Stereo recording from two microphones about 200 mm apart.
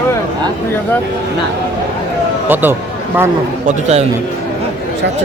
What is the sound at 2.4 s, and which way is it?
Speech, 10° right (ahead or behind).